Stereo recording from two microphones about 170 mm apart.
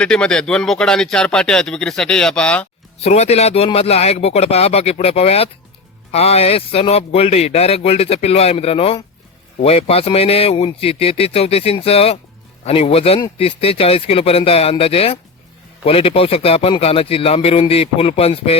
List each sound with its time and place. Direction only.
0.0 s speech: 5° left (ahead or behind)
3.0 s speech: 40° left (ahead or behind)